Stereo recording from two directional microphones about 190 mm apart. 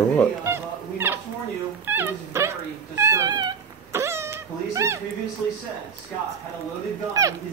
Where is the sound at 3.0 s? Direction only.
15° right (ahead or behind).